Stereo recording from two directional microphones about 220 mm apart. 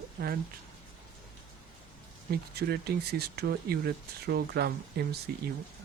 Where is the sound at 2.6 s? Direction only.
45° right (ahead or behind).